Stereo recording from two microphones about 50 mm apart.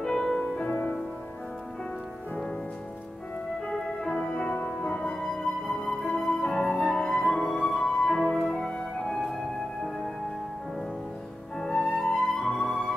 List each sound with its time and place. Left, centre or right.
0.0 s music: centre
3.6 s music: centre
4.6 s music: centre
5.1 s flute: centre
7.1 s music: centre
8.5 s music: left
9.1 s music: centre
11.5 s music: centre
12.4 s flute: centre